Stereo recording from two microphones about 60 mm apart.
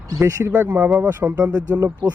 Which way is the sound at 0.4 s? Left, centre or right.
Right.